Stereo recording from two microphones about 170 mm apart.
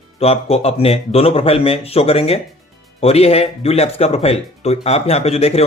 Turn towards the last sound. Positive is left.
turn(degrees=35)  # may be behind; listen again after turning